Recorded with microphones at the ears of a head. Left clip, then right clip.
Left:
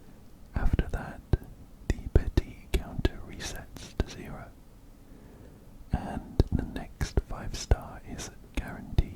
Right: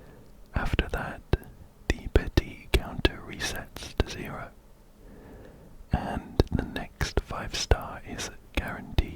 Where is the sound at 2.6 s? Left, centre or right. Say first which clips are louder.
Right 7 dB; right.